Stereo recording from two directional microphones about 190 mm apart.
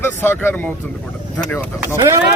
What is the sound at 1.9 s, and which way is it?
Speech, 20° right (ahead or behind).